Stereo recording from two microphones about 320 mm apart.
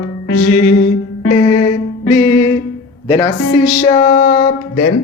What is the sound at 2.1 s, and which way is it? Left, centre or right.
Music, left.